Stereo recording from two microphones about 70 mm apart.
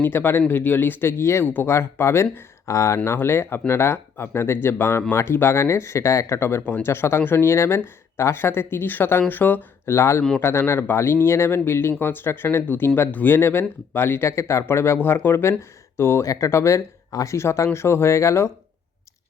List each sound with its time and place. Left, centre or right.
0.0 s speech: left
9.8 s speech: left
17.3 s speech: left